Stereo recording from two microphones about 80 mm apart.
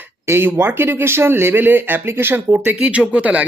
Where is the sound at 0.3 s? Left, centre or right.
Right.